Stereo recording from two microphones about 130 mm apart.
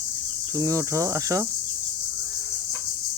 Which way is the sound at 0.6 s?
25° right (ahead or behind).